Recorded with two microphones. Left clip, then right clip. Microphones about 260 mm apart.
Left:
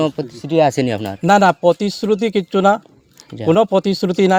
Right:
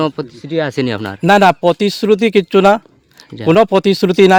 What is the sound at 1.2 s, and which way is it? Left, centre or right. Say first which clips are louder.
A man's voice: right 2 dB; right.